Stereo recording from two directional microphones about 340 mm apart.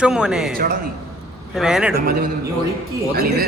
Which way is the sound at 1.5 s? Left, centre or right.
Centre.